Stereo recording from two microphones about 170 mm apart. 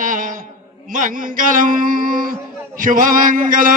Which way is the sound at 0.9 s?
50° right (ahead or behind).